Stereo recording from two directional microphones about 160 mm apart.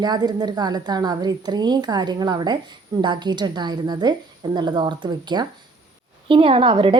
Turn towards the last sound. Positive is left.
turn(degrees=-35)  # may be behind; listen again after turning